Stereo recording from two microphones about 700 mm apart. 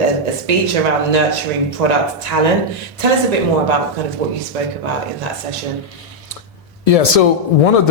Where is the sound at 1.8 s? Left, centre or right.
Right.